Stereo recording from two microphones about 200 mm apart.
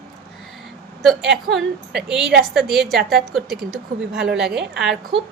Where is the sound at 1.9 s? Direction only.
55° right (ahead or behind).